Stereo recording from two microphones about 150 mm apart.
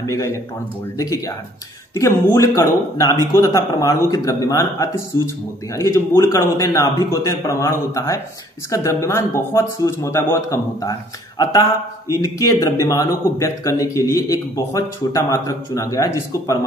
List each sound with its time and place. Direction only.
0.0 s speech: 20° left (ahead or behind)